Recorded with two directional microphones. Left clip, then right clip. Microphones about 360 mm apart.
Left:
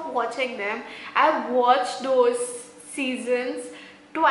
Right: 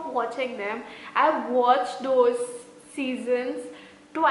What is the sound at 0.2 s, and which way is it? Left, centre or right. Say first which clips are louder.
A woman's voice: left 3 dB; centre.